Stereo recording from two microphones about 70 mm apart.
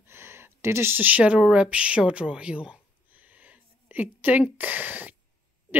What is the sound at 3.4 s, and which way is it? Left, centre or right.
Speech, right.